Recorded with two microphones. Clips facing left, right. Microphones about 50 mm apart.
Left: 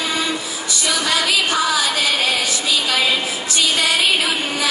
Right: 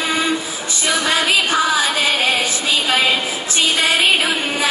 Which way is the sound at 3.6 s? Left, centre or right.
Right.